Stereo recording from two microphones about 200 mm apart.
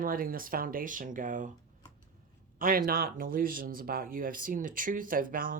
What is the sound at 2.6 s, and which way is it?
Speech, 45° right (ahead or behind).